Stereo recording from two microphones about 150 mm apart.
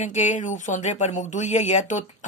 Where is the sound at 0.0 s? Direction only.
55° left (ahead or behind).